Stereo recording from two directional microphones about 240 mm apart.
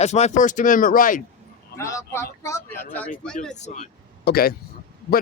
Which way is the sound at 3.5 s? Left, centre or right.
Left.